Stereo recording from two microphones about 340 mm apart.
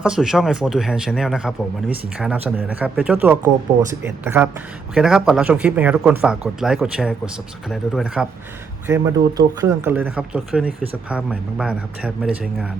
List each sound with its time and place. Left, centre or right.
0.0 s speech: centre